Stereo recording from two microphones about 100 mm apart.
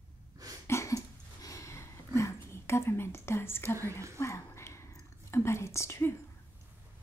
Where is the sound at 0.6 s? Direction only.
30° left (ahead or behind).